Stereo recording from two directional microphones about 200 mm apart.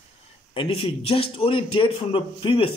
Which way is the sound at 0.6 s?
25° left (ahead or behind).